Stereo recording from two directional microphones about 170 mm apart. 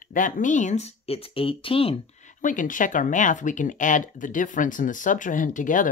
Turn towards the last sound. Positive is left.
turn(degrees=50)  # may be behind; listen again after turning